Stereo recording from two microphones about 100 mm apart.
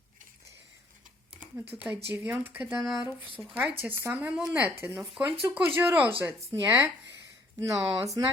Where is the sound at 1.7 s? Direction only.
25° right (ahead or behind).